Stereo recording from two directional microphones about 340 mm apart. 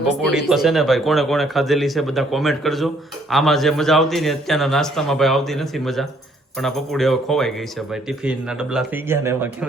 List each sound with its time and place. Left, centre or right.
0.3 s speech: centre